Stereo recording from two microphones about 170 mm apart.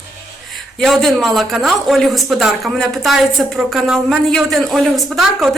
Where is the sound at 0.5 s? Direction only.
Centre (ahead or behind).